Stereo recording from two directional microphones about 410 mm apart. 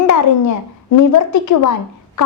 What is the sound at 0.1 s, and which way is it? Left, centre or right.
A child's voice, left.